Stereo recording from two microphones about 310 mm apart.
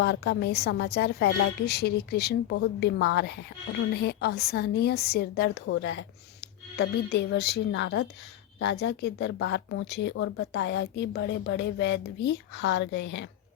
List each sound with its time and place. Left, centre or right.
0.0 s speech: left